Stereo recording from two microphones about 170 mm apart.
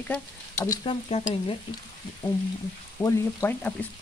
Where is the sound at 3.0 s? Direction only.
10° left (ahead or behind).